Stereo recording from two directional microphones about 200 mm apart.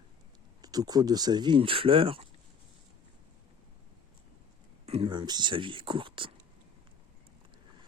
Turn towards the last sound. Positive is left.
turn(degrees=-25)  # may be behind; listen again after turning